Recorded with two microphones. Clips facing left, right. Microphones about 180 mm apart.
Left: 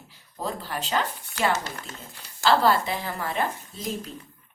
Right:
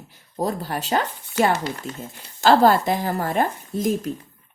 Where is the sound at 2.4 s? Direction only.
45° right (ahead or behind).